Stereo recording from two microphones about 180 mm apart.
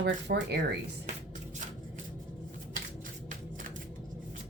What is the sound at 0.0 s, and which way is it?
Speech, 70° right (ahead or behind).